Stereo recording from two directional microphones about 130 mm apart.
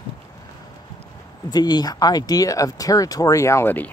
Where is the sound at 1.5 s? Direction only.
30° left (ahead or behind); by 3.9 s 15° left (ahead or behind).